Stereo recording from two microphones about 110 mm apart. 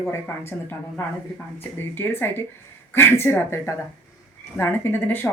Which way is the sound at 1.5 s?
20° left (ahead or behind).